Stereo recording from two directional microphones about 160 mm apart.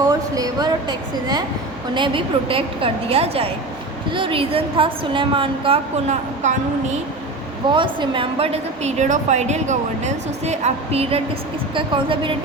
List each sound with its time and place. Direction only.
0.0 s a sound: 25° right (ahead or behind)
2.0 s a woman's voice: 35° right (ahead or behind)
7.7 s a woman's voice: 30° right (ahead or behind)